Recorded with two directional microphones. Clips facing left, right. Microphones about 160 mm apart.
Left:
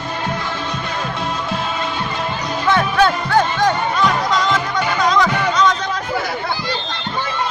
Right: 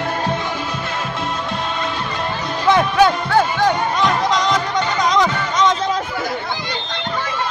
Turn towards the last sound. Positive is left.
turn(degrees=-20)  # may be behind; listen again after turning